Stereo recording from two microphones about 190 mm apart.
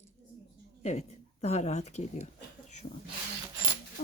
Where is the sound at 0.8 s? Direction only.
35° left (ahead or behind).